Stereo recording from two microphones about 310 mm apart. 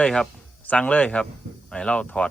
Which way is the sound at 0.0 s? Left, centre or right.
Centre.